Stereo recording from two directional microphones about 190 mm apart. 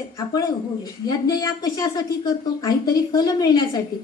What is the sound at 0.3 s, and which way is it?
A woman's voice, 20° left (ahead or behind).